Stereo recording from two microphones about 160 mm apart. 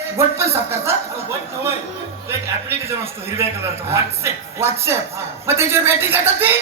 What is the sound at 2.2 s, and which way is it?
A man's voice, 15° right (ahead or behind).